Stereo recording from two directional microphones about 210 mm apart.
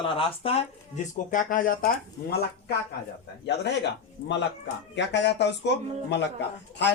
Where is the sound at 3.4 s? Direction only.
55° left (ahead or behind).